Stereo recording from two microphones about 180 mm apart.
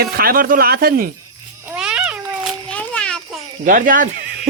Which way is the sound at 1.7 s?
5° right (ahead or behind).